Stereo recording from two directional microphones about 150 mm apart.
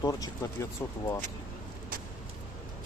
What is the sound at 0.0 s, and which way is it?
Speech, 25° left (ahead or behind).